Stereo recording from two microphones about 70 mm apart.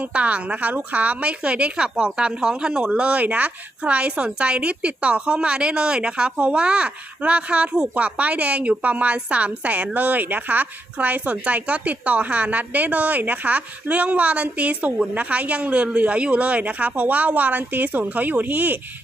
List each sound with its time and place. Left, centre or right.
0.1 s a woman's voice: centre